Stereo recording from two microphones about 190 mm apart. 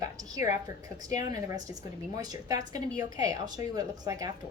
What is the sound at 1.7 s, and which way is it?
A woman's voice, 20° right (ahead or behind).